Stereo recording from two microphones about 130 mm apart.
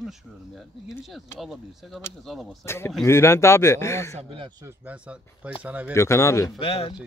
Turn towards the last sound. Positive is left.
turn(degrees=45)  # may be behind; listen again after turning